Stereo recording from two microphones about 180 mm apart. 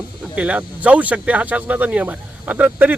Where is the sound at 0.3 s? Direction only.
10° right (ahead or behind).